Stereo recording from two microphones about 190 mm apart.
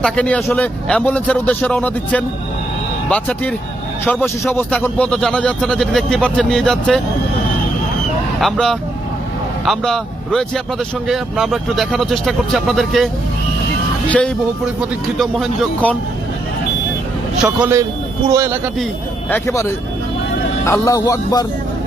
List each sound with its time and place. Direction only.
0.0 s a man's voice: 5° left (ahead or behind)
8.4 s a man's voice: centre (ahead or behind)
14.1 s speech: 5° left (ahead or behind)
17.4 s a man's voice: 10° right (ahead or behind)
19.3 s a man's voice: 15° left (ahead or behind)